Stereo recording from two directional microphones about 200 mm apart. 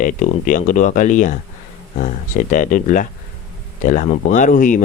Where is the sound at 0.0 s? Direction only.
40° left (ahead or behind).